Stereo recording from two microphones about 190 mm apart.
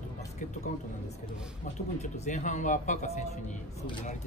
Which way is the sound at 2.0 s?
40° left (ahead or behind).